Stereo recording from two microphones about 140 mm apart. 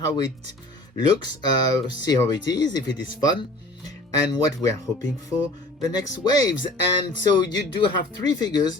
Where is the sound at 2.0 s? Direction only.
30° left (ahead or behind).